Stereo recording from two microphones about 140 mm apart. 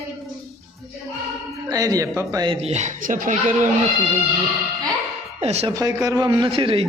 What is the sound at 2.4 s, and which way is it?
Speech, 45° right (ahead or behind).